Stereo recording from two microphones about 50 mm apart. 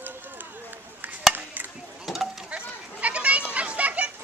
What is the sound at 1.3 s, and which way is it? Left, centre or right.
Chop, right.